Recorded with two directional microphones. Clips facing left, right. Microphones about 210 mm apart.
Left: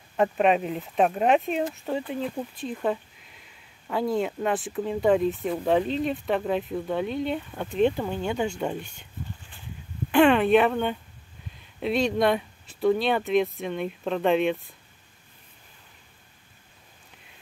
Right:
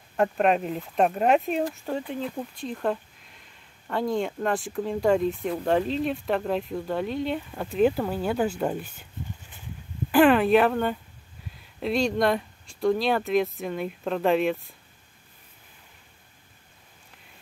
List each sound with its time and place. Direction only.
0.2 s speech: centre (ahead or behind)
10.1 s speech: 5° right (ahead or behind)